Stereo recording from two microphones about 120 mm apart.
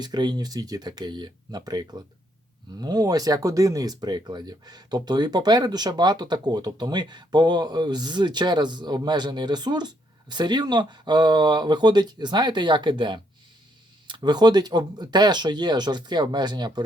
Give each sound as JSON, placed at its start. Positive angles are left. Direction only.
{"t": 0.0, "sound": "speech", "side_deg": -35}